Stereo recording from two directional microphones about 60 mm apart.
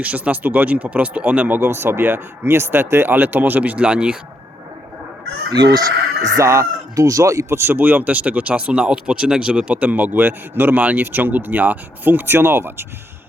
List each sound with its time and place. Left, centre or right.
0.0 s speech: right
5.5 s speech: right
6.3 s speech: right
7.6 s speech: right